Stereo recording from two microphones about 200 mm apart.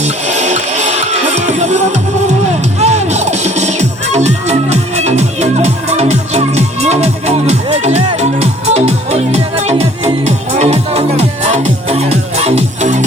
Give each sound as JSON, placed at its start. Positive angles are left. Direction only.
{"t": 0.0, "sound": "music", "side_deg": -35}